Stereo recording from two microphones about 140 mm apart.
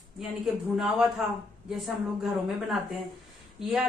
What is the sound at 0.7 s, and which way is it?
A man's voice, 5° right (ahead or behind).